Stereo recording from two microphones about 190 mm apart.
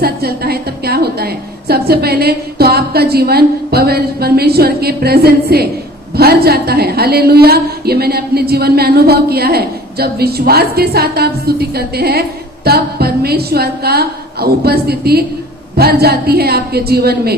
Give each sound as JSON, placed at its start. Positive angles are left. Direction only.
{"t": 0.0, "sound": "a woman's voice", "side_deg": -55}